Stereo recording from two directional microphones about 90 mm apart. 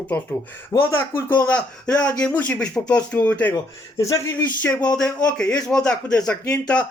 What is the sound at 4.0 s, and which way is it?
Speech, 35° left (ahead or behind).